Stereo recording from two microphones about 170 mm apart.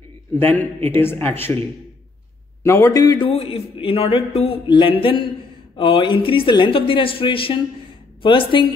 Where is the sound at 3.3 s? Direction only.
35° left (ahead or behind).